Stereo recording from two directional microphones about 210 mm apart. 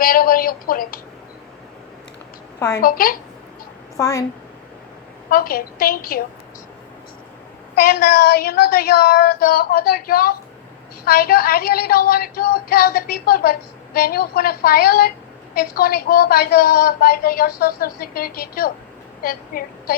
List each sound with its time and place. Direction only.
0.0 s speech: 45° left (ahead or behind)
2.6 s a woman's voice: 15° left (ahead or behind)
2.8 s female singing: 45° left (ahead or behind)
3.9 s a woman's voice: 15° left (ahead or behind)
5.3 s female singing: 45° left (ahead or behind)
7.8 s female singing: 45° left (ahead or behind)
19.2 s a woman's voice: 45° left (ahead or behind)